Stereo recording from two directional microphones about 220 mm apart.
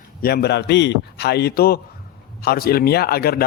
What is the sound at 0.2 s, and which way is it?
A man's voice, 45° left (ahead or behind).